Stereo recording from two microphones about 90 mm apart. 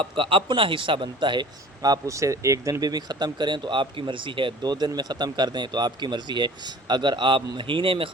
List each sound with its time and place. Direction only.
0.0 s speech: 75° right (ahead or behind)